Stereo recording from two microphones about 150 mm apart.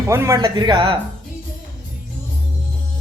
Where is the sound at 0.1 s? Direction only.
20° right (ahead or behind).